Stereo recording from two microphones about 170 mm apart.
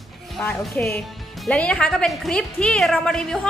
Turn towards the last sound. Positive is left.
turn(degrees=5)  # may be behind; listen again after turning